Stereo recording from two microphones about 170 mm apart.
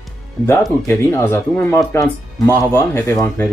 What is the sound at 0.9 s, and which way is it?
Speech, 15° left (ahead or behind).